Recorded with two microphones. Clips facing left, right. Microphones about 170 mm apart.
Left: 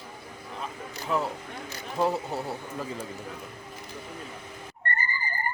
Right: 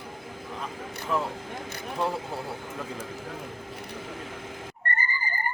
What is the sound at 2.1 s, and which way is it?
Speech, 25° left (ahead or behind).